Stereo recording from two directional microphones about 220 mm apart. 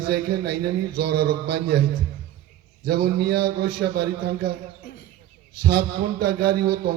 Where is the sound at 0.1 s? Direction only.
45° right (ahead or behind).